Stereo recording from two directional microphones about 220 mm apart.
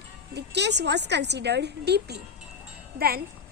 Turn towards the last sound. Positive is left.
turn(degrees=-45)  # may be behind; listen again after turning